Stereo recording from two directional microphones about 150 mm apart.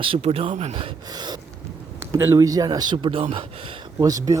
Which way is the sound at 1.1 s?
30° right (ahead or behind).